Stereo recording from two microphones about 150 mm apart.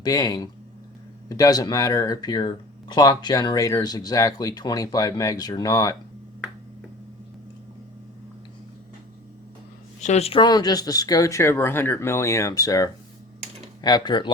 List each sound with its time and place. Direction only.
0.0 s speech: 25° left (ahead or behind)
10.0 s speech: 45° left (ahead or behind)
10.4 s speech: 25° left (ahead or behind)